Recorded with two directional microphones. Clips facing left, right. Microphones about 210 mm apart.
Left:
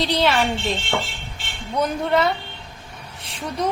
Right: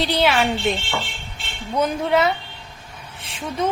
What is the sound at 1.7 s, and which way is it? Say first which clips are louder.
A woman's voice: right 1 dB; 5° right (ahead or behind).